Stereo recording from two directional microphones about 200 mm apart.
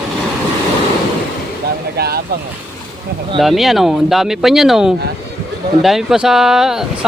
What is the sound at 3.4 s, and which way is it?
Speech, centre (ahead or behind).